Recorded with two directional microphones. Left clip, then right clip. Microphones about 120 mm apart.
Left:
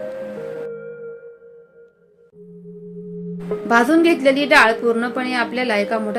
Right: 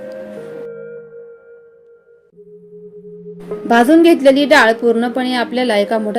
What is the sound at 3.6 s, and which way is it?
A woman's voice, 50° right (ahead or behind).